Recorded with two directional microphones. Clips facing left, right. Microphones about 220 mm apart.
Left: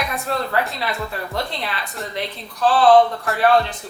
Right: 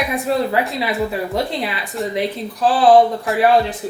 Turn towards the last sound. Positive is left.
turn(degrees=-5)  # may be behind; listen again after turning